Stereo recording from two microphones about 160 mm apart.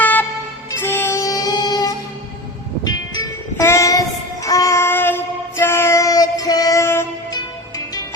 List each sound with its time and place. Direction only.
0.0 s music: 10° left (ahead or behind)
4.4 s child singing: 20° left (ahead or behind)